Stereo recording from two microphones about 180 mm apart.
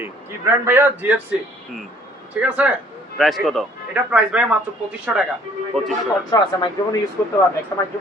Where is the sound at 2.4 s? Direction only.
5° right (ahead or behind).